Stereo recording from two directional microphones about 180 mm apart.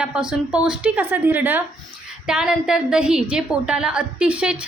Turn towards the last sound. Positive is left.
turn(degrees=-5)  # may be behind; listen again after turning